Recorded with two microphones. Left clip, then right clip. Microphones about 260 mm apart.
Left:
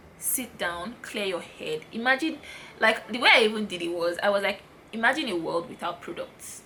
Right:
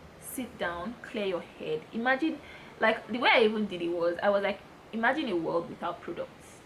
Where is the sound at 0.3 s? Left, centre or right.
Centre.